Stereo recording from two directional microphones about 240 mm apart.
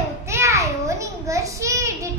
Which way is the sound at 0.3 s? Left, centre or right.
Centre.